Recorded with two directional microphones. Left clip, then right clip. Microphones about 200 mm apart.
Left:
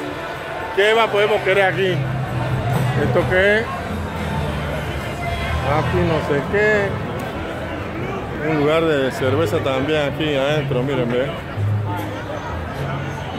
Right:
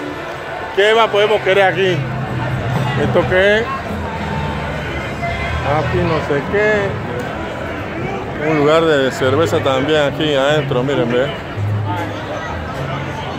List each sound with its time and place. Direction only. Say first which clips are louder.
0.7 s speech: right 3 dB; 10° right (ahead or behind)
3.2 s speech: right 3 dB; 5° right (ahead or behind)
6.5 s speech: right 2 dB; centre (ahead or behind)
8.6 s speech: right 5 dB; 15° right (ahead or behind)